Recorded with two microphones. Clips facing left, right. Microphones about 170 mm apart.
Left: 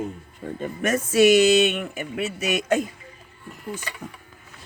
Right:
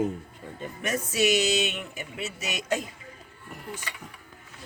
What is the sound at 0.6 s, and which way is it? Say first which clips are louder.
Speech: left 6 dB; 50° left (ahead or behind).